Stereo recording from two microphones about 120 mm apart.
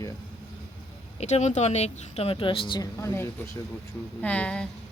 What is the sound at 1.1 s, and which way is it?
Speech, 70° left (ahead or behind).